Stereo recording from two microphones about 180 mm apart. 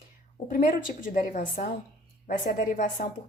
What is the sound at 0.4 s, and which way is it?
A woman's voice, 50° left (ahead or behind).